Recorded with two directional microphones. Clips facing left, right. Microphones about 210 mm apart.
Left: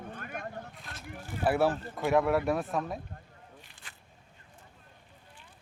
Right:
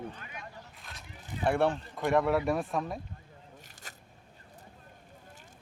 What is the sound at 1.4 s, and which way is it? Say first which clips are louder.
Speech: left 1 dB; 5° left (ahead or behind).